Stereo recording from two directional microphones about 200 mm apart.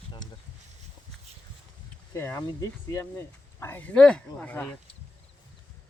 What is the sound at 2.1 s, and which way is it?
Speech, 10° left (ahead or behind).